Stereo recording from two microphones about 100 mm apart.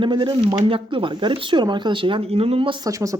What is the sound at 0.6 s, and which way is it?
Speech, 65° right (ahead or behind).